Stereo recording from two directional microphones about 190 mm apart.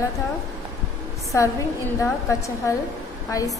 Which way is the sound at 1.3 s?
15° left (ahead or behind).